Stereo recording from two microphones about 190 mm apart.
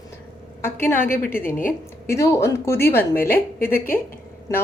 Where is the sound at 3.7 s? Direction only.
50° left (ahead or behind).